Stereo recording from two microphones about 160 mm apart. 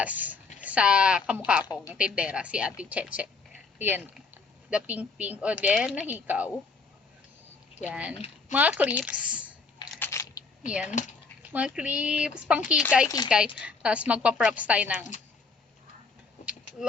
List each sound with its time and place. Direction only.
0.0 s a woman's voice: 10° right (ahead or behind)
7.8 s a woman's voice: 10° right (ahead or behind)
10.0 s a sound: 20° left (ahead or behind)
10.7 s a woman's voice: 5° right (ahead or behind)